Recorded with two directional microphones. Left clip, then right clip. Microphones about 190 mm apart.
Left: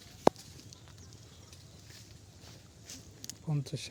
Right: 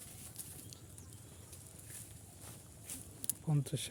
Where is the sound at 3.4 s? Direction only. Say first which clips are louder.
Even; 15° right (ahead or behind).